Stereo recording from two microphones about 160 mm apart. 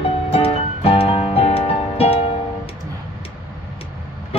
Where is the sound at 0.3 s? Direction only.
35° left (ahead or behind).